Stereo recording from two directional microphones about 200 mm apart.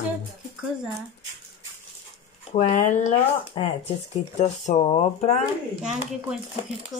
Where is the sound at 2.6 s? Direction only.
35° left (ahead or behind).